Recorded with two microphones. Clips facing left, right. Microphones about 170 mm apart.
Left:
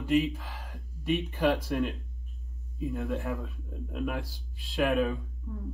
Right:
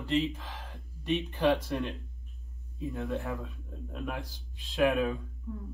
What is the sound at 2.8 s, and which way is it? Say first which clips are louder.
Speech: left 2 dB; centre (ahead or behind).